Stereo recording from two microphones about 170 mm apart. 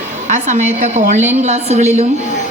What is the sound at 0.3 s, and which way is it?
A woman's voice, 45° right (ahead or behind).